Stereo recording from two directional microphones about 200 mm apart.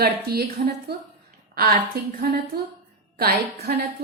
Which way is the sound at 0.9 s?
55° right (ahead or behind).